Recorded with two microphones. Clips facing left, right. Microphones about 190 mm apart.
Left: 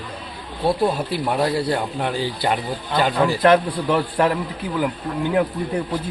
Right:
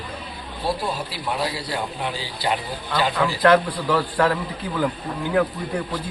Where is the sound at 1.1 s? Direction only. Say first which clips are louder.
Left 6 dB; 55° left (ahead or behind).